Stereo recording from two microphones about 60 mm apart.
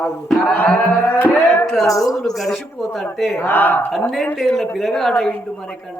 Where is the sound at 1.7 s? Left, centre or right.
Centre.